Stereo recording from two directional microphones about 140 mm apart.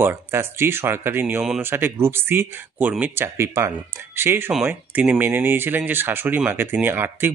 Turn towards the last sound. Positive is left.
turn(degrees=-15)  # may be behind; listen again after turning